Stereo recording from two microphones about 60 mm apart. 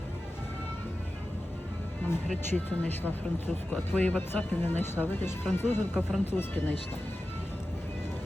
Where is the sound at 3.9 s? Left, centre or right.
Left.